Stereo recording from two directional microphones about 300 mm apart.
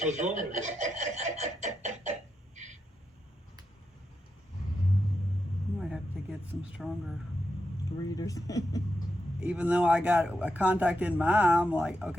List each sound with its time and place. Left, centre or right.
0.0 s a sound: right
6.6 s speech: centre
7.9 s speech: centre
9.4 s speech: centre